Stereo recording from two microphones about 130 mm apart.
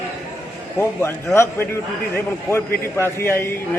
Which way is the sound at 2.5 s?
20° left (ahead or behind).